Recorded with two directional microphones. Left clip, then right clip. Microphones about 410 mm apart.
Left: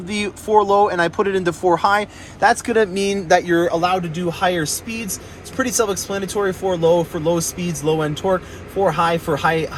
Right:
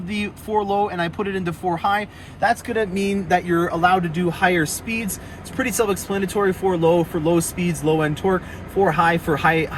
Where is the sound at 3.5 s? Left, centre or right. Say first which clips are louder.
Left 1 dB; centre.